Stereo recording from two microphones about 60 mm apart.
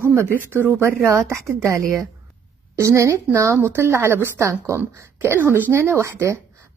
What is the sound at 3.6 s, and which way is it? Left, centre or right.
A woman's voice, right.